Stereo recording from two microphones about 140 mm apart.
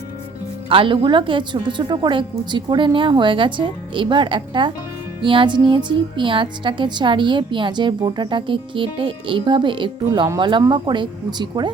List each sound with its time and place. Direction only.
0.7 s speech: 40° right (ahead or behind)